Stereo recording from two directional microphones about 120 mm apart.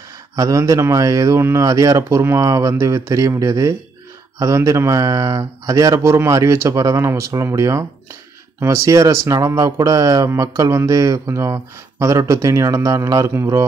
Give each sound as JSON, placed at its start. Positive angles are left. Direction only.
{"t": 0.4, "sound": "speech", "side_deg": -30}